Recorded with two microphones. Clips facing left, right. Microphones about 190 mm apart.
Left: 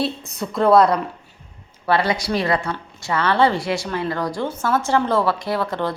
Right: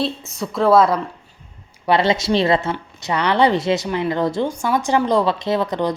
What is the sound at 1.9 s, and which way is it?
Speech, 25° right (ahead or behind).